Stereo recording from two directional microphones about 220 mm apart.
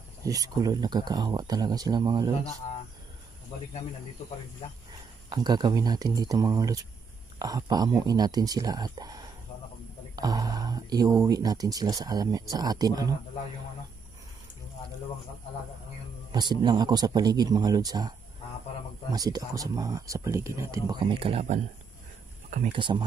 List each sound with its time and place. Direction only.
0.2 s speech: 15° right (ahead or behind)
5.3 s speech: 20° right (ahead or behind)
16.3 s speech: 20° right (ahead or behind)
19.1 s speech: 15° right (ahead or behind)